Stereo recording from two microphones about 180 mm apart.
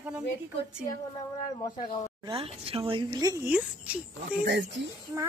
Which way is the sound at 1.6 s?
25° left (ahead or behind).